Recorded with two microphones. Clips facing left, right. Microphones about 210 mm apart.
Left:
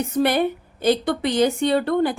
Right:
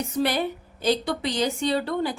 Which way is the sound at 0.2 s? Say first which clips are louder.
Left 5 dB; 55° left (ahead or behind).